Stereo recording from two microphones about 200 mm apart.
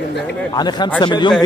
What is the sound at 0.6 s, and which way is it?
Speech, 20° left (ahead or behind).